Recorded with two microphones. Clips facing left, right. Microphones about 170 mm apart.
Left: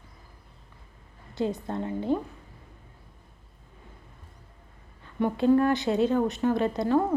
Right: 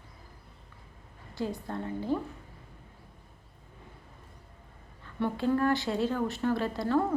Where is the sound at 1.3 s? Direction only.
20° left (ahead or behind).